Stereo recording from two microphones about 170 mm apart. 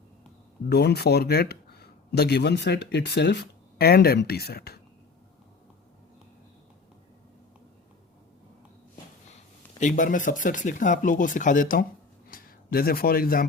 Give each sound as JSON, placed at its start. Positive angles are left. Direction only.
{"t": 0.7, "sound": "speech", "side_deg": 75}
{"t": 9.8, "sound": "a man's voice", "side_deg": 50}